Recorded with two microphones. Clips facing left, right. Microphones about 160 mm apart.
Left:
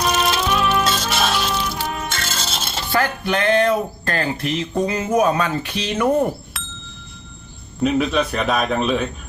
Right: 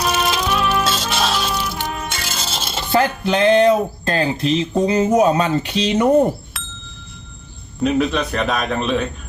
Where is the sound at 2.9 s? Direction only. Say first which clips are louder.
Right 3 dB; 25° right (ahead or behind).